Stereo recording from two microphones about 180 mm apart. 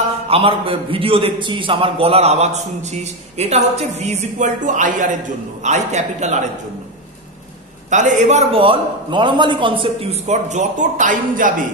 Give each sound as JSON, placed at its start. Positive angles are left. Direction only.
{"t": 0.3, "sound": "a man's voice", "side_deg": -30}
{"t": 7.9, "sound": "a man's voice", "side_deg": -40}